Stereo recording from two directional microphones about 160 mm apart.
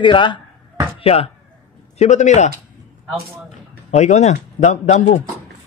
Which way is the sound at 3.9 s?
45° left (ahead or behind).